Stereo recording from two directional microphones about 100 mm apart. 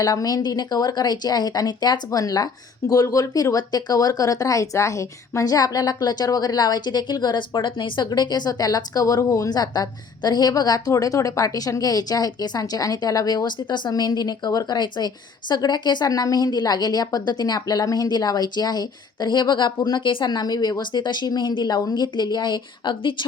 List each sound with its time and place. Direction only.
0.0 s a woman's voice: 40° left (ahead or behind)